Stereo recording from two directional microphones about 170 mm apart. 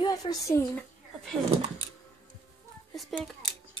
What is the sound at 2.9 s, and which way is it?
Speech, centre (ahead or behind).